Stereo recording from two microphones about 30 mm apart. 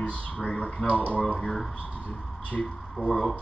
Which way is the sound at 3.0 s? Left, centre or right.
Left.